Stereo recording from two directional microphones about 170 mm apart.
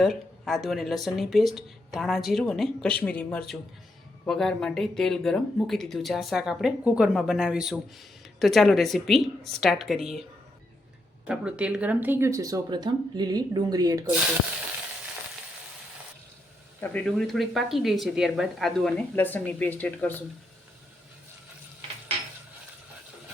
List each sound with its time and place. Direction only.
0.0 s speech: centre (ahead or behind)
11.3 s speech: 5° right (ahead or behind)
16.8 s speech: 5° left (ahead or behind)